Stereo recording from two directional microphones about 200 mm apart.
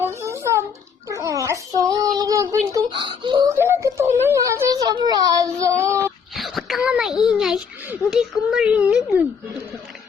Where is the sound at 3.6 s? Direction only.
10° right (ahead or behind).